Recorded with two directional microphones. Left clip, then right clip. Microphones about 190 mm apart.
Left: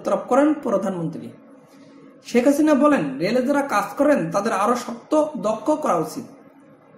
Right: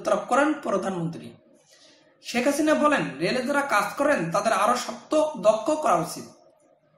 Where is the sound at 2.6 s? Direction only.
35° left (ahead or behind).